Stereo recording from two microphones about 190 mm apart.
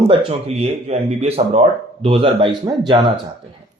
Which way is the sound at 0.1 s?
30° right (ahead or behind).